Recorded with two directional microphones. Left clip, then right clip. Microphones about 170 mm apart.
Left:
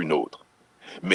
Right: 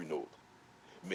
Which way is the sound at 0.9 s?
55° left (ahead or behind).